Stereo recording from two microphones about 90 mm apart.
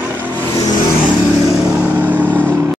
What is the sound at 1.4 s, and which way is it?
Vehicle, 35° right (ahead or behind).